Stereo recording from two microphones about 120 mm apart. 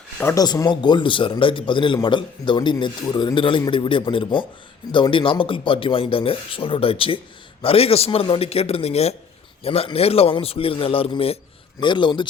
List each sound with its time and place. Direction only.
0.3 s a man's voice: 35° left (ahead or behind); by 11.3 s 50° left (ahead or behind)
11.8 s speech: 40° left (ahead or behind)